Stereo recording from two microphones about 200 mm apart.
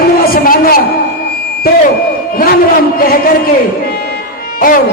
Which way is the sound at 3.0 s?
45° left (ahead or behind).